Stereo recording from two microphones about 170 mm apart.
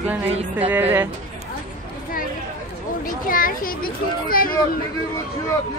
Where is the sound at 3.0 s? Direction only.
55° left (ahead or behind).